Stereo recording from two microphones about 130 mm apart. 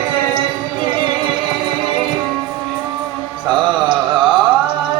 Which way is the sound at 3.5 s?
40° right (ahead or behind).